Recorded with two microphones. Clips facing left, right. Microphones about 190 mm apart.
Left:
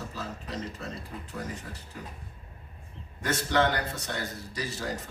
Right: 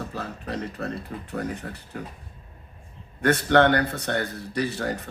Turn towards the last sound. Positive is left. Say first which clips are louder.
# right 7 dB
turn(degrees=-60)  # may be behind; listen again after turning